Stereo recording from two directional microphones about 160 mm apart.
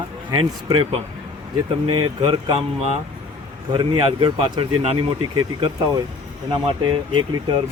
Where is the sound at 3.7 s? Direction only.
30° right (ahead or behind).